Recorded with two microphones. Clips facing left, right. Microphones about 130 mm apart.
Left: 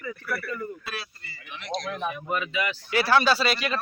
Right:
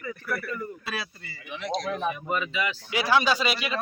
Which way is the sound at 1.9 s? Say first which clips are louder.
Right 1 dB; centre (ahead or behind).